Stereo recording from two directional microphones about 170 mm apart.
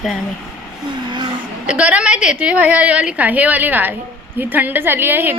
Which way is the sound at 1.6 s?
10° right (ahead or behind).